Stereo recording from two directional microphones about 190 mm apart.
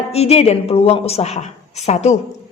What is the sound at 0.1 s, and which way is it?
A woman's voice, 35° left (ahead or behind).